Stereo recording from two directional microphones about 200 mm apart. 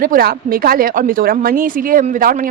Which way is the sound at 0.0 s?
45° right (ahead or behind).